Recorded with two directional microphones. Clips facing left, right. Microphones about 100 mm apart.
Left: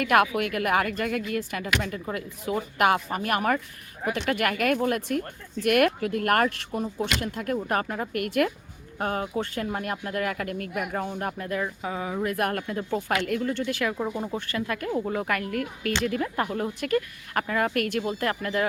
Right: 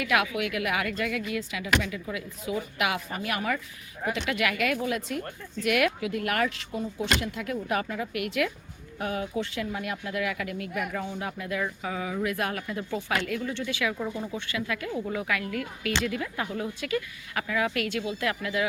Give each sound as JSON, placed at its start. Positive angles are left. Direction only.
{"t": 0.0, "sound": "speech", "side_deg": 50}
{"t": 7.2, "sound": "speech", "side_deg": 50}
{"t": 11.8, "sound": "speech", "side_deg": 30}
{"t": 12.4, "sound": "speech", "side_deg": 55}